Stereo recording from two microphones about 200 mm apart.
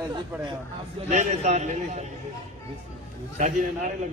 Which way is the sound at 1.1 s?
35° right (ahead or behind).